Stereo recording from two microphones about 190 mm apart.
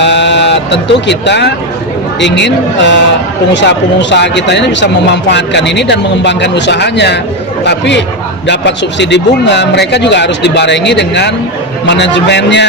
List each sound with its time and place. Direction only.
0.0 s speech: 65° left (ahead or behind)